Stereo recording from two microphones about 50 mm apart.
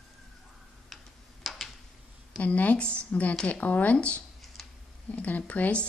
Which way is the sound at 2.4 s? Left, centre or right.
Left.